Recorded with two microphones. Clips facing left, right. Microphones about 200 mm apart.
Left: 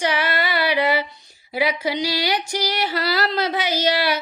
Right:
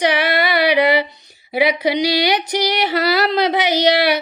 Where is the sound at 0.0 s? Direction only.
75° right (ahead or behind).